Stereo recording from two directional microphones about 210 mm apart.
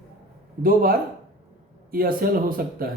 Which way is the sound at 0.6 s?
45° right (ahead or behind).